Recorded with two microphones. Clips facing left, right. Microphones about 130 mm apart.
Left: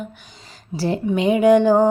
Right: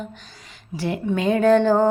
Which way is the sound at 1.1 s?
15° left (ahead or behind).